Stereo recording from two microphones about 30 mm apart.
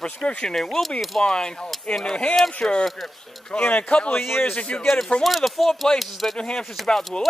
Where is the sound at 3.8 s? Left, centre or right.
Left.